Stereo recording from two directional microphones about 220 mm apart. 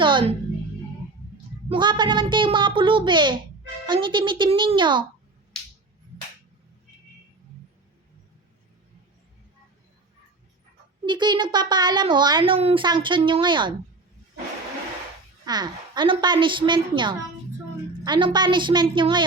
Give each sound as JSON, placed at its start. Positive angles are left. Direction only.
{"t": 0.0, "sound": "music", "side_deg": -20}
{"t": 1.7, "sound": "a child's voice", "side_deg": -20}
{"t": 11.0, "sound": "a child's voice", "side_deg": -20}
{"t": 15.4, "sound": "a child's voice", "side_deg": -20}